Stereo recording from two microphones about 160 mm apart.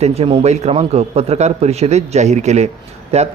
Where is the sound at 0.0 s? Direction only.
40° right (ahead or behind).